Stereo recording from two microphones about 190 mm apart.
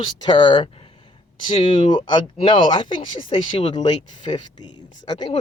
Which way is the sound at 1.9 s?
25° left (ahead or behind).